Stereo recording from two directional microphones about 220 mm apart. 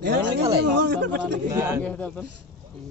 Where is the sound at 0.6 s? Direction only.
50° right (ahead or behind).